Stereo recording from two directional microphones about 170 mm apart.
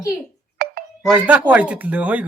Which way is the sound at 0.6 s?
60° right (ahead or behind).